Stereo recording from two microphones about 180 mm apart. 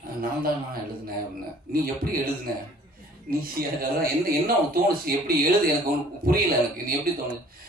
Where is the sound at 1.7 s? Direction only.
55° right (ahead or behind).